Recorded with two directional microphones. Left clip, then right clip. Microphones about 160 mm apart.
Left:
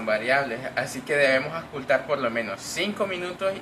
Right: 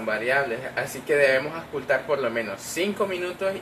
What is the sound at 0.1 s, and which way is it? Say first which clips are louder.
Speech: left 1 dB; 40° right (ahead or behind).